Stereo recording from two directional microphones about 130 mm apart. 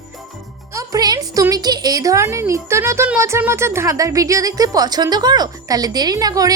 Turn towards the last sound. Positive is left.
turn(degrees=-25)  # may be behind; listen again after turning